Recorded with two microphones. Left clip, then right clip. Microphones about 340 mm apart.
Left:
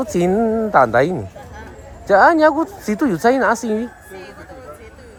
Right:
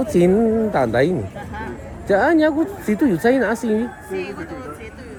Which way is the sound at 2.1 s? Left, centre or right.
Left.